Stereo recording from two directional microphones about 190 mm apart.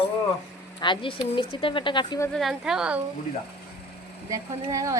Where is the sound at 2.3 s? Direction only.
Centre (ahead or behind).